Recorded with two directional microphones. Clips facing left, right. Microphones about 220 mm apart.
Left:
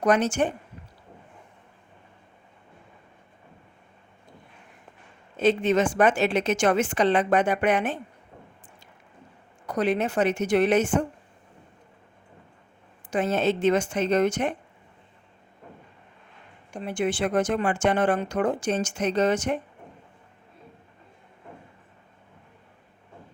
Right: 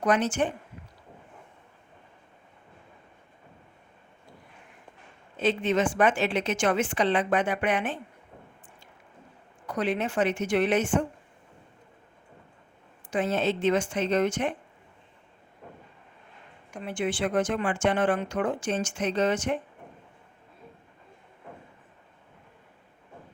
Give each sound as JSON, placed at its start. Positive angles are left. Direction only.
{"t": 0.0, "sound": "speech", "side_deg": 40}
{"t": 5.4, "sound": "a woman's voice", "side_deg": 45}
{"t": 9.6, "sound": "speech", "side_deg": 40}
{"t": 13.1, "sound": "a woman's voice", "side_deg": 45}
{"t": 16.7, "sound": "speech", "side_deg": 40}